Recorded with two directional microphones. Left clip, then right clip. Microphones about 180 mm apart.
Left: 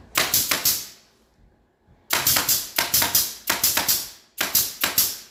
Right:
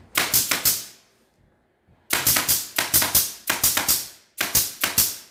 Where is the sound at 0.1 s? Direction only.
5° right (ahead or behind).